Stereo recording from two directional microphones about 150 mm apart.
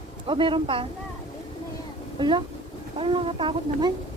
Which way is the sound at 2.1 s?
30° right (ahead or behind).